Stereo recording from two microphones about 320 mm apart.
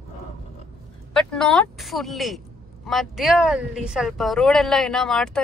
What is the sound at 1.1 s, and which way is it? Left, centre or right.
Speech, centre.